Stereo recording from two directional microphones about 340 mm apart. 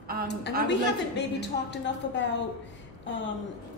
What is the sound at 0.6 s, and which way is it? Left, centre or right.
A woman's voice, left.